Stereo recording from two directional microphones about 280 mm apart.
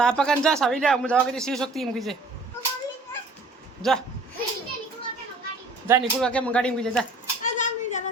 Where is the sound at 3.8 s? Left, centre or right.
Centre.